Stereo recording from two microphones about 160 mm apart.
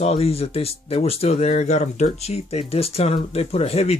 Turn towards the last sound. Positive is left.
turn(degrees=40)  # may be behind; listen again after turning